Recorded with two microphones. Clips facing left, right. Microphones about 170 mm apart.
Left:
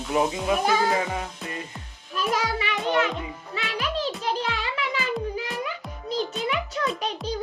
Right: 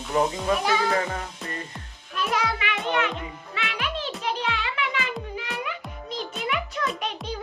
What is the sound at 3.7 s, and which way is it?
Music, 35° left (ahead or behind).